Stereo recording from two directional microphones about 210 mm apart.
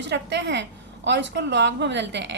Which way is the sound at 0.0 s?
55° right (ahead or behind).